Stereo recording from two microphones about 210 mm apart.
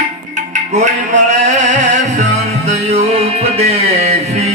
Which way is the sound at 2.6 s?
30° right (ahead or behind).